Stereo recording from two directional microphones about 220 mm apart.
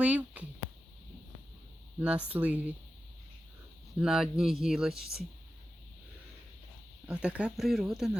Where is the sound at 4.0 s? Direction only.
Centre (ahead or behind).